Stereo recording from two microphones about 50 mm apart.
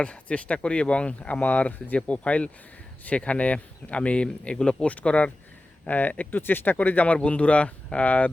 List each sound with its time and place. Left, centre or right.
0.0 s speech: left
6.7 s speech: left